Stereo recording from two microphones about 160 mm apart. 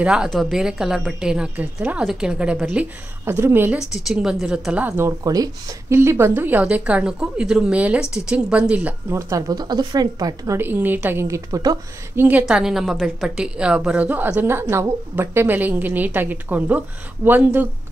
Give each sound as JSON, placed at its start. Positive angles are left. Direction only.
{"t": 0.0, "sound": "a woman's voice", "side_deg": -5}
{"t": 3.9, "sound": "a woman's voice", "side_deg": -5}
{"t": 9.3, "sound": "a woman's voice", "side_deg": -25}
{"t": 12.3, "sound": "a woman's voice", "side_deg": -10}